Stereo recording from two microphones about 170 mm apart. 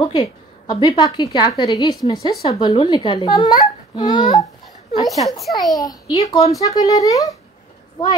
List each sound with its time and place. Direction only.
0.0 s a child's voice: 25° left (ahead or behind)
5.2 s a child's voice: centre (ahead or behind)
5.7 s a child's voice: 20° left (ahead or behind)